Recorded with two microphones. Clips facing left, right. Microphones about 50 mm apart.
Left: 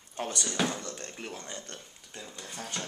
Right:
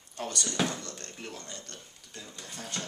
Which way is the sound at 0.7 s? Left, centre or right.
Left.